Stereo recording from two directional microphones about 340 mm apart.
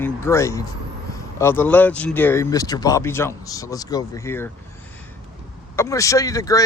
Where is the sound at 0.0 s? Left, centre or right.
Centre.